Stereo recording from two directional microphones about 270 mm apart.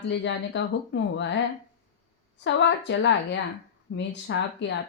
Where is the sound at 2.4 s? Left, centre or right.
Left.